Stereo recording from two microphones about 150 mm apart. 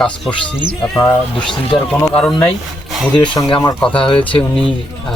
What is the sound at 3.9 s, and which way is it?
Speech, 35° left (ahead or behind).